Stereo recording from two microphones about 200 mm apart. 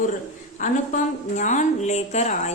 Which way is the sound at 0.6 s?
40° left (ahead or behind).